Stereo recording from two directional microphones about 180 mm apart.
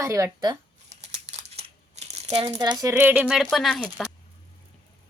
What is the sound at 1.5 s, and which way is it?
Speech, 35° right (ahead or behind).